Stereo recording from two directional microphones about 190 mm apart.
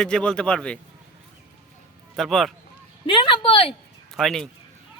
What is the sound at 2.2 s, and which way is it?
Speech, centre (ahead or behind).